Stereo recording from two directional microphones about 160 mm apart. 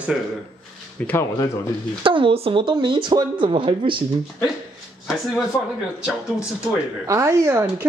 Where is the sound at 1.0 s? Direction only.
10° left (ahead or behind).